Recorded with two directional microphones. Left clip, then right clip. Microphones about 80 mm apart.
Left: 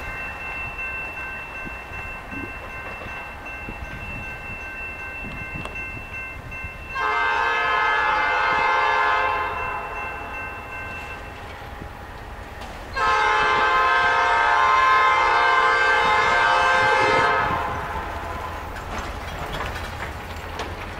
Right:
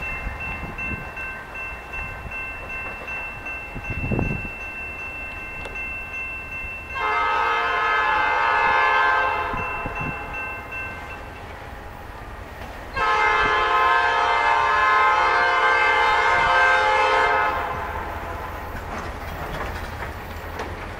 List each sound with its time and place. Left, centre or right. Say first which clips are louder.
7.0 s train: even; centre
12.9 s train: even; centre
18.9 s train: left 2 dB; left